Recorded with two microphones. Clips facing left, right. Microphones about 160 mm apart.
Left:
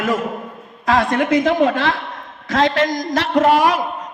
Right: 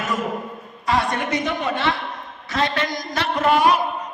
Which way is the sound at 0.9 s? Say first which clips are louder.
Left 6 dB; 90° left.